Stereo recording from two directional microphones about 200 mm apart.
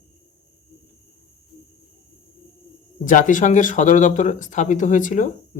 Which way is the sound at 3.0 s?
40° left (ahead or behind).